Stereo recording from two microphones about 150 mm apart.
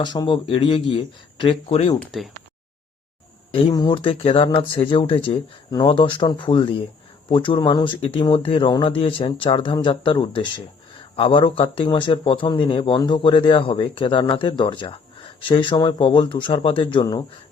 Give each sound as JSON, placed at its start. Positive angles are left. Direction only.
{"t": 0.0, "sound": "a man's voice", "side_deg": 30}
{"t": 2.0, "sound": "speech", "side_deg": 0}
{"t": 3.5, "sound": "speech", "side_deg": 35}